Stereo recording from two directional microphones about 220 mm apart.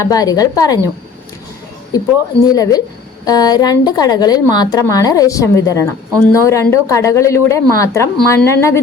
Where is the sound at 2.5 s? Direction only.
15° left (ahead or behind).